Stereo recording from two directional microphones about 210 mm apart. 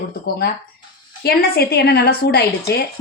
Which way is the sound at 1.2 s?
50° left (ahead or behind).